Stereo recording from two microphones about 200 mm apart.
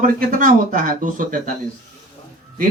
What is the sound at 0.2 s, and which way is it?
Speech, 45° right (ahead or behind).